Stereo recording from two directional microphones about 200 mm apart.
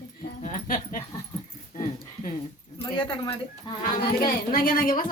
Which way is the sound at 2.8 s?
25° left (ahead or behind).